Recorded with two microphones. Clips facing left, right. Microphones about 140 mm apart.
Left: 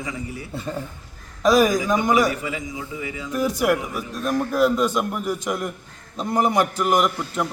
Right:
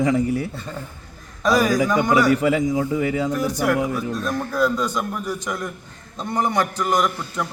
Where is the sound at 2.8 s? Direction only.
50° right (ahead or behind).